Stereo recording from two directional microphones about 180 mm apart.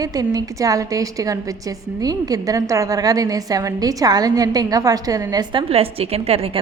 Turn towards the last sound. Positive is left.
turn(degrees=-35)  # may be behind; listen again after turning